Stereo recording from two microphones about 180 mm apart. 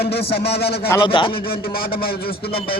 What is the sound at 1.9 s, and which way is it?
Speech, 60° left (ahead or behind).